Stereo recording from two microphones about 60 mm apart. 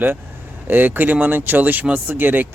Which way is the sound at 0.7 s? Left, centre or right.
Right.